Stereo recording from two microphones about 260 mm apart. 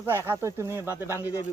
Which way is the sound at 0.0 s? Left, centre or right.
Centre.